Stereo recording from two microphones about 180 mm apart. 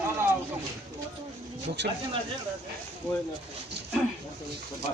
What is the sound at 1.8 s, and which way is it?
Speech, 75° right (ahead or behind).